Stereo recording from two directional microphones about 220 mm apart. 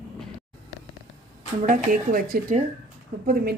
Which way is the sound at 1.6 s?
35° right (ahead or behind).